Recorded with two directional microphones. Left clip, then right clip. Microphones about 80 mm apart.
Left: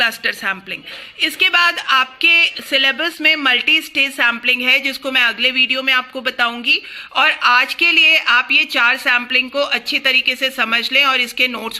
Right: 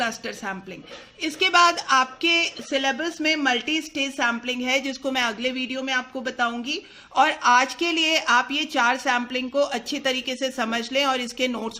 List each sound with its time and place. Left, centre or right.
0.0 s a woman's voice: right
2.6 s a woman's voice: centre
4.6 s a woman's voice: right
5.4 s a woman's voice: centre
7.2 s a woman's voice: right
9.6 s speech: right